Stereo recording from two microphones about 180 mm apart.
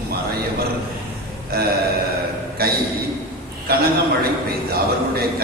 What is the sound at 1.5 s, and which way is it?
A man's voice, 60° right (ahead or behind).